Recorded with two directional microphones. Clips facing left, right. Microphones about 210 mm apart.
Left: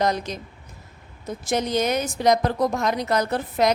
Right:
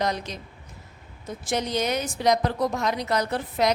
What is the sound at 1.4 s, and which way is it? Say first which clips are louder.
A woman's voice: left 3 dB; 45° left (ahead or behind).